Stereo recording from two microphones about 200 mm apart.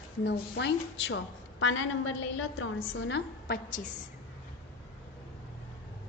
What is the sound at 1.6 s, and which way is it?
A woman's voice, 80° left.